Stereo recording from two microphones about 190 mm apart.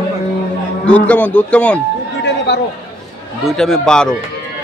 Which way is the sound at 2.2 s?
65° left (ahead or behind).